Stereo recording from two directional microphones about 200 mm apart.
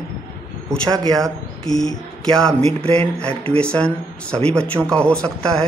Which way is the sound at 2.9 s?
5° left (ahead or behind).